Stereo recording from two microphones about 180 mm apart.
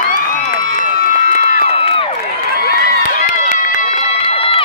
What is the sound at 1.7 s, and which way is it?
Crowd, 30° left (ahead or behind).